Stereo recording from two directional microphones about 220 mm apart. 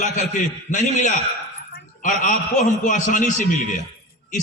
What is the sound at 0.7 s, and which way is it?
A man's voice, 35° left (ahead or behind).